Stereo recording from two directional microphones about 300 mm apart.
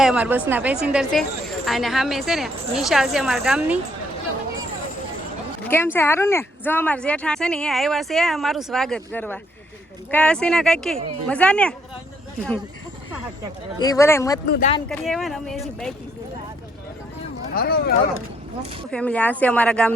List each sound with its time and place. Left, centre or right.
0.0 s a woman's voice: centre
5.6 s a woman's voice: centre
13.7 s speech: centre
14.5 s speech: left
14.8 s a woman's voice: centre
17.5 s speech: left
18.9 s a woman's voice: centre